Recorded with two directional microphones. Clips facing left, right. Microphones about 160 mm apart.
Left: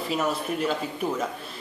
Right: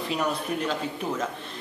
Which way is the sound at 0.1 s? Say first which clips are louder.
Left 1 dB; 5° left (ahead or behind).